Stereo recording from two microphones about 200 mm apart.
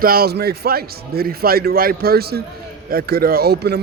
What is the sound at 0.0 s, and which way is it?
Speech, 50° right (ahead or behind).